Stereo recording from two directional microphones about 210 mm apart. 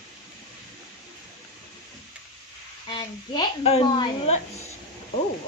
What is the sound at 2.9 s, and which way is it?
Speech, 20° left (ahead or behind).